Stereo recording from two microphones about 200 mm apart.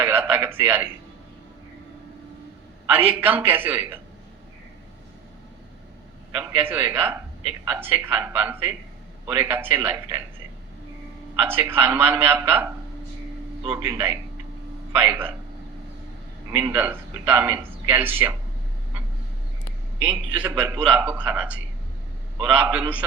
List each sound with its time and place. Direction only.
0.0 s a man's voice: 10° right (ahead or behind)
2.9 s a man's voice: 10° right (ahead or behind)
6.3 s a man's voice: 10° right (ahead or behind)
11.3 s a man's voice: 10° right (ahead or behind)
13.7 s a man's voice: 10° right (ahead or behind)
16.5 s a man's voice: 10° right (ahead or behind)
20.0 s a man's voice: 5° right (ahead or behind)